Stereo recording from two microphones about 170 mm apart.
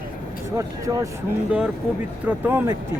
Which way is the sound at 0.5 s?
20° right (ahead or behind).